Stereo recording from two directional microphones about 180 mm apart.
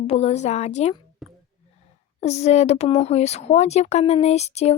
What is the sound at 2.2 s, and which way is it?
Speech, 35° left (ahead or behind).